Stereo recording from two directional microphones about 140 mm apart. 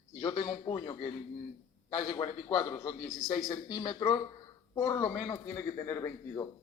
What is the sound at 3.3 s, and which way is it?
A man's voice, 25° left (ahead or behind).